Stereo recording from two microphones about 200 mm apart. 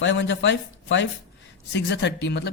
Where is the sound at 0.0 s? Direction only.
65° left (ahead or behind).